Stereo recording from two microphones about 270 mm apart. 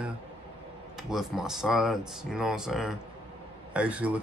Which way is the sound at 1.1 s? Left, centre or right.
Centre.